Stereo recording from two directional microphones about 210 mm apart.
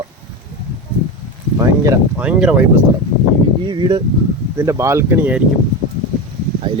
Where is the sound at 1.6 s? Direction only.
15° right (ahead or behind).